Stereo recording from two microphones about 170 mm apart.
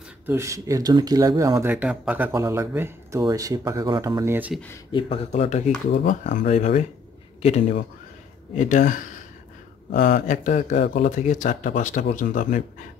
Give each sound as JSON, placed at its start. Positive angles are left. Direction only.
{"t": 0.3, "sound": "speech", "side_deg": -15}
{"t": 4.9, "sound": "speech", "side_deg": 35}